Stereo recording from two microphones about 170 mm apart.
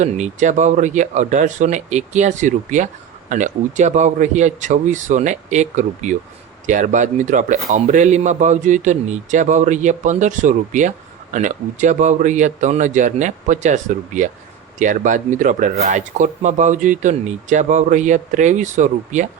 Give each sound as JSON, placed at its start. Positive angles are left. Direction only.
{"t": 0.0, "sound": "a man's voice", "side_deg": -45}